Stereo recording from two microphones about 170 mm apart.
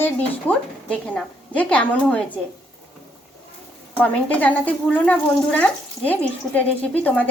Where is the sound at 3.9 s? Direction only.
10° left (ahead or behind).